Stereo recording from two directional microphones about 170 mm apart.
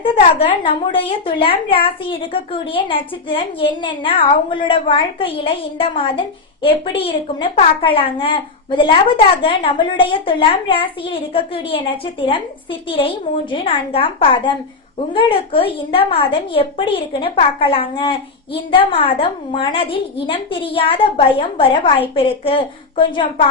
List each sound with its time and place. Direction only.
0.6 s a woman's voice: 30° left (ahead or behind)
13.5 s a woman's voice: 35° left (ahead or behind)